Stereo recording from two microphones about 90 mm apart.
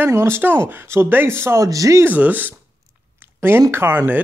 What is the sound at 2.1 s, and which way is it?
Speech, 20° right (ahead or behind).